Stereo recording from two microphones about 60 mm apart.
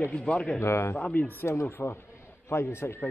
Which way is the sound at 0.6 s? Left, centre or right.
Left.